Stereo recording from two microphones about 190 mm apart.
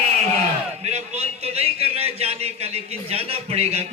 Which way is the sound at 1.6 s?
30° right (ahead or behind).